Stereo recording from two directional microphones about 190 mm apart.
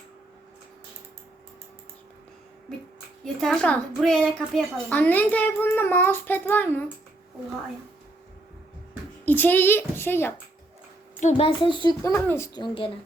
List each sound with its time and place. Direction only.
3.4 s a woman's voice: 5° left (ahead or behind)
9.2 s a woman's voice: 10° left (ahead or behind)
11.2 s a child's voice: 35° left (ahead or behind)
12.1 s a woman's voice: 15° left (ahead or behind)
12.6 s a child's voice: 25° left (ahead or behind)